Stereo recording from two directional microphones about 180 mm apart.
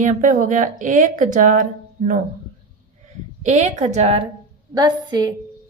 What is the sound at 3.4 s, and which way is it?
Speech, 40° right (ahead or behind).